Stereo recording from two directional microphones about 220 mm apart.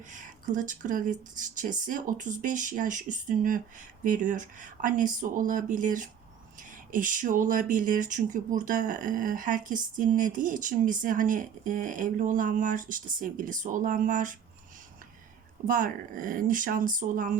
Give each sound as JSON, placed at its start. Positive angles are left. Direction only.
{"t": 0.1, "sound": "speech", "side_deg": -35}
{"t": 15.6, "sound": "speech", "side_deg": -35}